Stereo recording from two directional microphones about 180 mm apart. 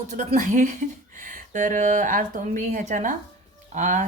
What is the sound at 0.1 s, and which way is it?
Speech, 40° right (ahead or behind).